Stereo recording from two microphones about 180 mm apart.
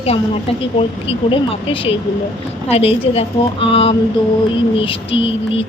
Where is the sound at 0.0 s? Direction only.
35° left (ahead or behind).